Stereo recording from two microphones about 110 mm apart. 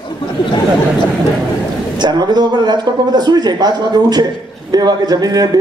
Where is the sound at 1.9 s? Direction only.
40° right (ahead or behind).